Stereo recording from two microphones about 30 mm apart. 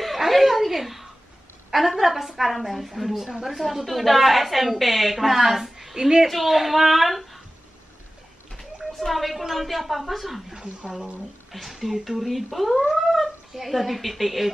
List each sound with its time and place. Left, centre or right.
0.0 s a sound: centre
1.7 s speech: centre
6.3 s speech: centre
9.1 s speech: centre
10.5 s speech: right
11.5 s speech: centre